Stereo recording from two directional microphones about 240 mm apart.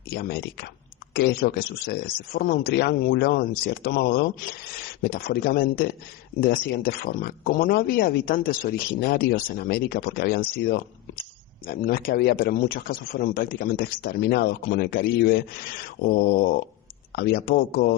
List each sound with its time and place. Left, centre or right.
0.1 s speech: left